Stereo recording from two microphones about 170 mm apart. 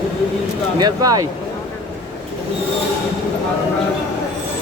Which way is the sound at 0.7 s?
20° right (ahead or behind).